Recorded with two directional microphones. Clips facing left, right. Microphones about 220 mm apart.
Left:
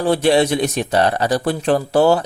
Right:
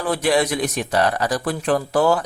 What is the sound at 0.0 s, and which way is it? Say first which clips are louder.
A man's voice: left 5 dB; 30° left (ahead or behind).